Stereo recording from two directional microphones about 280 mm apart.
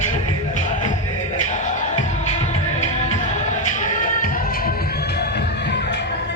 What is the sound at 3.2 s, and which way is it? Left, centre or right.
Music, left.